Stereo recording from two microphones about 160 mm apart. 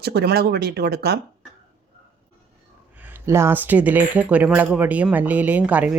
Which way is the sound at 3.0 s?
15° right (ahead or behind).